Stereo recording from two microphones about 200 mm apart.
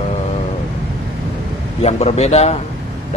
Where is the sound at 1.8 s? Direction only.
35° left (ahead or behind).